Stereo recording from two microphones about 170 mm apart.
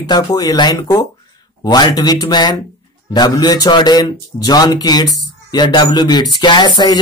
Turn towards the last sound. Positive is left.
turn(degrees=25)  # may be behind; listen again after turning